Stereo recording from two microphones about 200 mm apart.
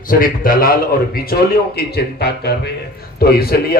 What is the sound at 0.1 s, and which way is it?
A man's voice, 45° left (ahead or behind).